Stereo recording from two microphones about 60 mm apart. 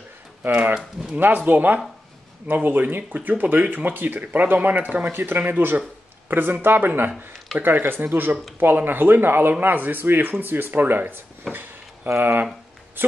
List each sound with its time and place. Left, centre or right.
0.5 s speech: right
12.2 s speech: right